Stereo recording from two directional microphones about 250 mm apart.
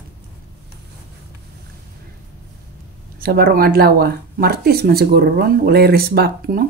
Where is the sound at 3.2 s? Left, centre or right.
Right.